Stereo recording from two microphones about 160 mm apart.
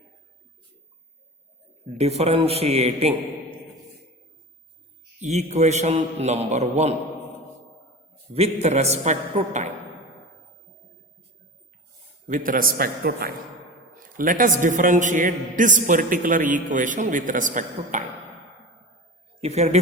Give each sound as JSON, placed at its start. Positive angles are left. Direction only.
{"t": 2.0, "sound": "a man's voice", "side_deg": -40}
{"t": 5.2, "sound": "a man's voice", "side_deg": -45}
{"t": 8.3, "sound": "a man's voice", "side_deg": -40}
{"t": 12.3, "sound": "a man's voice", "side_deg": -60}
{"t": 19.4, "sound": "a man's voice", "side_deg": -45}